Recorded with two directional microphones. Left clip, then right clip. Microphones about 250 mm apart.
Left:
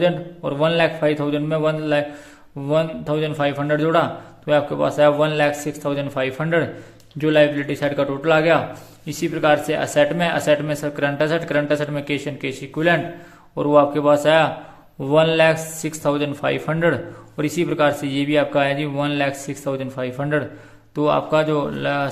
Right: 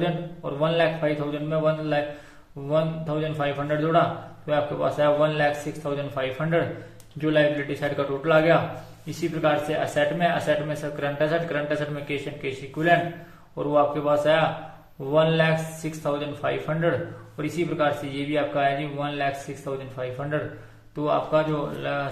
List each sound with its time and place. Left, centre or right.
0.0 s a man's voice: left